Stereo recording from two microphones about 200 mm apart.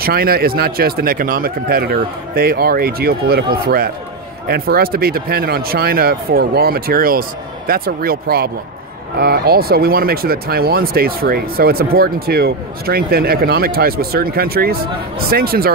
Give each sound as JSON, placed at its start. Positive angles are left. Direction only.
{"t": 0.0, "sound": "speech", "side_deg": -50}